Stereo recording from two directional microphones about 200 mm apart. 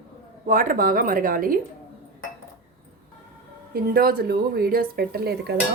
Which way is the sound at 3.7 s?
50° right (ahead or behind).